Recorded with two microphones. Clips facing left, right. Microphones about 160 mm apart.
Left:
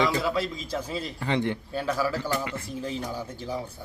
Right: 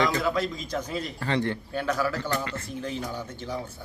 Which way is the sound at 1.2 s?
15° left (ahead or behind).